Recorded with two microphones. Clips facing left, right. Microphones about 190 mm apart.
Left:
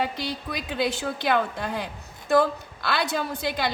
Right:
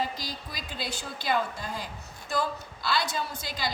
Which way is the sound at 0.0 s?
65° left (ahead or behind).